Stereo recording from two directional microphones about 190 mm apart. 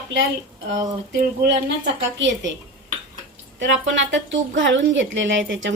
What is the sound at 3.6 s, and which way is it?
A woman's voice, 75° right (ahead or behind).